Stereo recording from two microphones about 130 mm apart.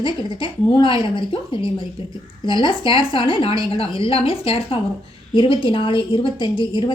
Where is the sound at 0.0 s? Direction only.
40° left (ahead or behind).